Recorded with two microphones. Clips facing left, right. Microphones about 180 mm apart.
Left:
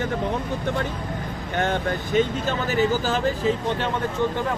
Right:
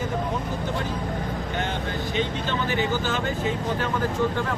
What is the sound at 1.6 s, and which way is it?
Speech, 50° left (ahead or behind).